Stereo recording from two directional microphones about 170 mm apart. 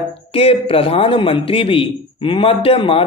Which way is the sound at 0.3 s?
35° left (ahead or behind).